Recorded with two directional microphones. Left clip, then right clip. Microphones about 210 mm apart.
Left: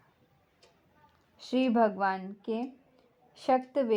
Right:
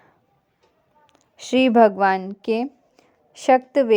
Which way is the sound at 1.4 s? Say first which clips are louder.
Right 12 dB; 25° right (ahead or behind).